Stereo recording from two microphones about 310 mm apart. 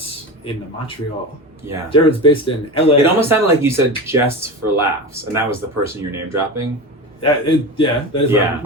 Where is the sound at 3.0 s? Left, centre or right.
Centre.